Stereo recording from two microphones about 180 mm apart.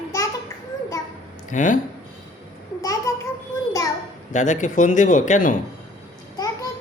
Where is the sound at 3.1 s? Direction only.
15° left (ahead or behind).